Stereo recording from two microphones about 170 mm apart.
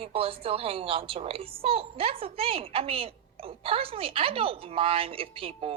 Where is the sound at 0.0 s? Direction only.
35° right (ahead or behind).